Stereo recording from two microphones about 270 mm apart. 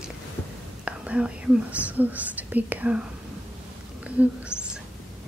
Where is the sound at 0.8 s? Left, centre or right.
Centre.